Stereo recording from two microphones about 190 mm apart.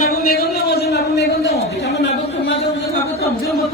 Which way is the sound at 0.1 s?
55° left (ahead or behind).